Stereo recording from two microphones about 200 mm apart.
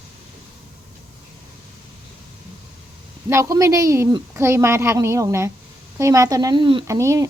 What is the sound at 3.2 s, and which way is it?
Speech, 15° right (ahead or behind).